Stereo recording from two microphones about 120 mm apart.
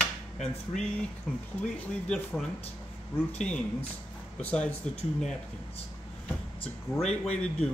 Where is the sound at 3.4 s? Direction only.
10° left (ahead or behind).